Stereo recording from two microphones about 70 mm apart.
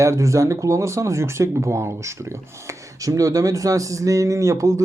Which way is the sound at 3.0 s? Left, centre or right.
Right.